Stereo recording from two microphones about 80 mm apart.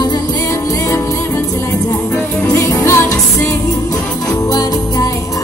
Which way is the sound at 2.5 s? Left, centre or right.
Left.